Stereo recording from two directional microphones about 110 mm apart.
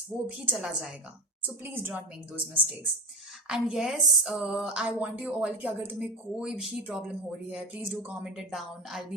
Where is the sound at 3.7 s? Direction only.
5° right (ahead or behind).